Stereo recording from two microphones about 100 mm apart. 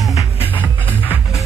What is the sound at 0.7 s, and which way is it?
Music, 15° left (ahead or behind).